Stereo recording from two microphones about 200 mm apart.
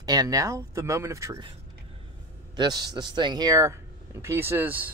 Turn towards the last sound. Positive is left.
turn(degrees=-10)  # may be behind; listen again after turning